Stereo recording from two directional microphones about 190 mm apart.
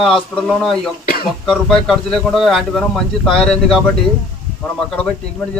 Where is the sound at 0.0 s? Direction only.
Centre (ahead or behind).